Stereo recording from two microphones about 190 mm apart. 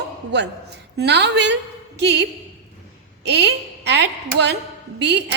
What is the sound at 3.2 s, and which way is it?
A woman's voice, 60° right (ahead or behind).